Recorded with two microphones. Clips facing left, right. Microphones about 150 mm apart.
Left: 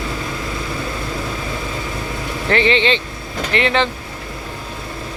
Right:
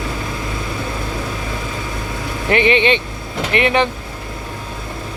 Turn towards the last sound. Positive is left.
turn(degrees=-15)  # may be behind; listen again after turning